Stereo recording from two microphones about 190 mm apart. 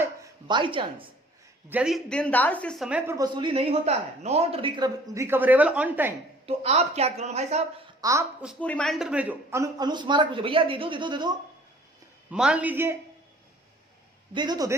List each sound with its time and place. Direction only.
0.0 s a sound: 20° right (ahead or behind)
1.7 s a woman's voice: 5° right (ahead or behind)
3.1 s speech: 20° right (ahead or behind)
6.4 s speech: 35° right (ahead or behind)
8.0 s speech: 20° right (ahead or behind)
8.6 s speech: 5° left (ahead or behind); by 11.3 s 25° right (ahead or behind)
12.3 s a man's voice: 5° right (ahead or behind)
14.3 s speech: 20° right (ahead or behind)